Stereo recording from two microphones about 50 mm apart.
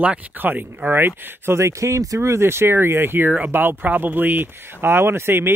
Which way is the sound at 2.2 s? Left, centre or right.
Right.